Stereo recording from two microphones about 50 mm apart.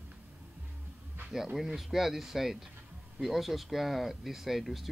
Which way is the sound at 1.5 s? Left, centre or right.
Centre.